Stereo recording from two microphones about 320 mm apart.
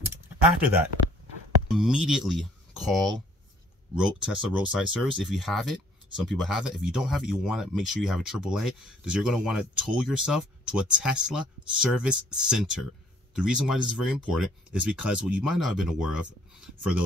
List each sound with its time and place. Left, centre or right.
1.7 s speech: centre